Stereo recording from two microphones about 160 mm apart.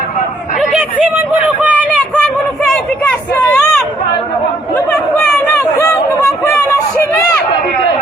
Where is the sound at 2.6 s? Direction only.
5° left (ahead or behind).